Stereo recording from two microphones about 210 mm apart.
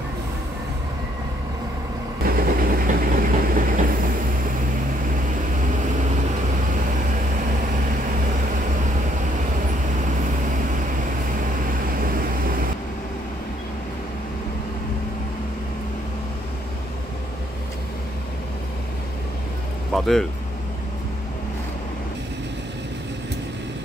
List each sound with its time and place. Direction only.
2.2 s vehicle: 45° right (ahead or behind)
19.9 s vehicle: centre (ahead or behind)